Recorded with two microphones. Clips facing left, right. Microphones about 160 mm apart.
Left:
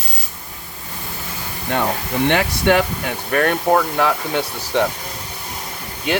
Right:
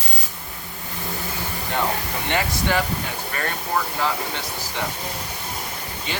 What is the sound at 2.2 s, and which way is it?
Speech, 70° left (ahead or behind).